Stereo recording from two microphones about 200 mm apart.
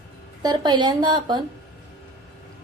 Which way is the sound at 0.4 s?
20° right (ahead or behind).